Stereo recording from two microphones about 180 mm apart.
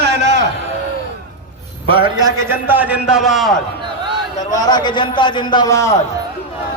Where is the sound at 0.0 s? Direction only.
70° right (ahead or behind).